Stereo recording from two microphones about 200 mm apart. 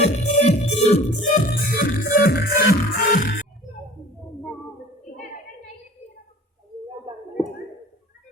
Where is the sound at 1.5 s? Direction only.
50° left (ahead or behind).